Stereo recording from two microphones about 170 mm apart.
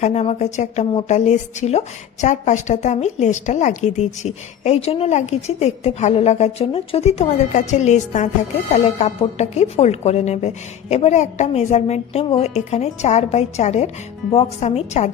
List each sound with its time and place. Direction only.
0.0 s a woman's voice: 40° left (ahead or behind)